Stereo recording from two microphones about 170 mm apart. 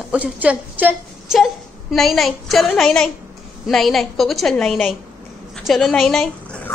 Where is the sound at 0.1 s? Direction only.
5° right (ahead or behind).